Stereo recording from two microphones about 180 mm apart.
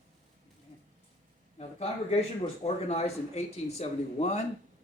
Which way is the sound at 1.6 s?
35° left (ahead or behind).